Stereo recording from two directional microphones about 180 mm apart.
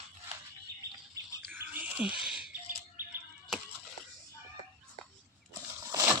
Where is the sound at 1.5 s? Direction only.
10° right (ahead or behind).